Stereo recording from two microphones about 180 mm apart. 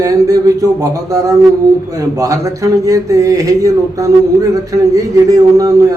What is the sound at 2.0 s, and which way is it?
Speech, 20° right (ahead or behind).